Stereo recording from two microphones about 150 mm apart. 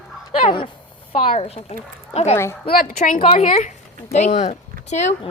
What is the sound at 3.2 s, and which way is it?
Speech, 40° left (ahead or behind).